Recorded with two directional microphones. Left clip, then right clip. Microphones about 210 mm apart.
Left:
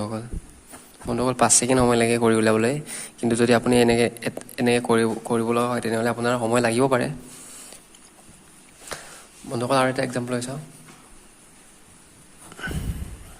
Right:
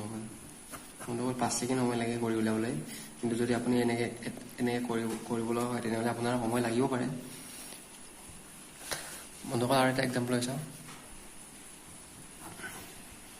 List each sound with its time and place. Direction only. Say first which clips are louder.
1.1 s a man's voice: left 13 dB; 50° left (ahead or behind)
8.9 s a sound: left 4 dB; 25° left (ahead or behind)
9.5 s a man's voice: left 7 dB; 30° left (ahead or behind)